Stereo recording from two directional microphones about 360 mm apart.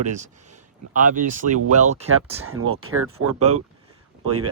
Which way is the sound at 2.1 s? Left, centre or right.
Right.